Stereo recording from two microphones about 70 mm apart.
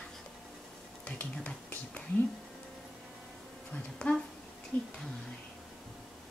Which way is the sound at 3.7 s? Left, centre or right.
Centre.